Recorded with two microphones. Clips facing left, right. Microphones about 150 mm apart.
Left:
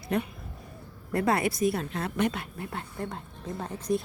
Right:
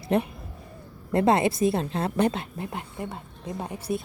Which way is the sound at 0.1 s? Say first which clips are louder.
Right 5 dB; 30° right (ahead or behind).